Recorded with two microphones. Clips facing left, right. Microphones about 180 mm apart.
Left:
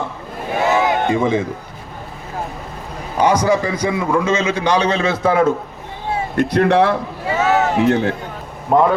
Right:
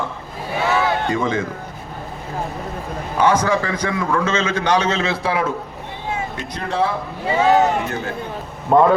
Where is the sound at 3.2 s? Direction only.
10° left (ahead or behind).